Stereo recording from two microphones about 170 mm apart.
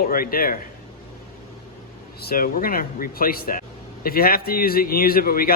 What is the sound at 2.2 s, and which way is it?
A man's voice, 60° left (ahead or behind).